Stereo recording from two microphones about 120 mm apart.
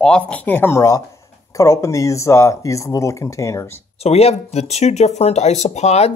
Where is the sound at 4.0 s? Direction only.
60° left (ahead or behind).